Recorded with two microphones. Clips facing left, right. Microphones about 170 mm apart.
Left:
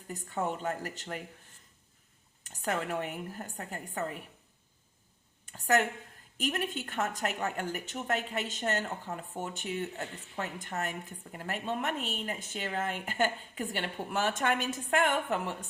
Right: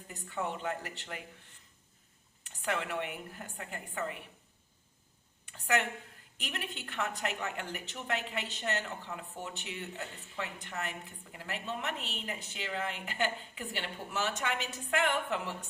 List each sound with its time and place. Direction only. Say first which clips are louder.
0.1 s a woman's voice: left 3 dB; 45° left (ahead or behind)
2.4 s a woman's voice: left 2 dB; 45° left (ahead or behind)
5.5 s a sound: left 4 dB; 40° left (ahead or behind)
6.3 s a woman's voice: left 9 dB; 45° left (ahead or behind)